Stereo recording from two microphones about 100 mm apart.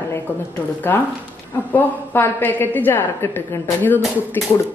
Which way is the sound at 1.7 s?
20° left (ahead or behind).